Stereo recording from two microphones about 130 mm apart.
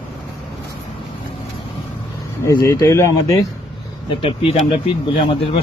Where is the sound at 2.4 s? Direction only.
25° left (ahead or behind).